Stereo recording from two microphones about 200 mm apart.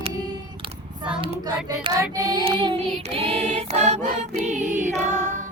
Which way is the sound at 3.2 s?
30° right (ahead or behind).